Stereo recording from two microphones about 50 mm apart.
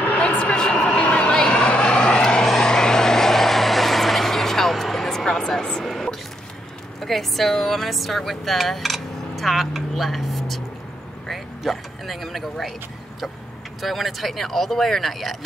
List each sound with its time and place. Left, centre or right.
0.2 s a sound: left
1.3 s vehicle: centre
7.0 s speech: centre
13.7 s speech: centre